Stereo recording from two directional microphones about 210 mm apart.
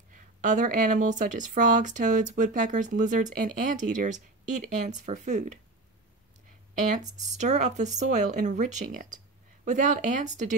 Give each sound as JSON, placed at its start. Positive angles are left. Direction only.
{"t": 0.4, "sound": "speech", "side_deg": -35}
{"t": 6.9, "sound": "speech", "side_deg": -35}